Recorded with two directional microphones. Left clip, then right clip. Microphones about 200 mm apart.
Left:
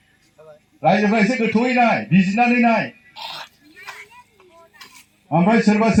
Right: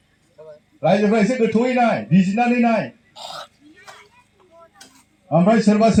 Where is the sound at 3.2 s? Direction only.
55° right (ahead or behind).